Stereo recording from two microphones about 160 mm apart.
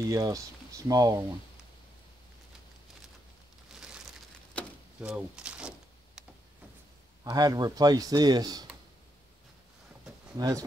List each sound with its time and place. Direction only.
0.0 s speech: 20° right (ahead or behind)
5.0 s a sound: 5° right (ahead or behind)
7.2 s speech: 25° right (ahead or behind)
10.3 s speech: 20° right (ahead or behind)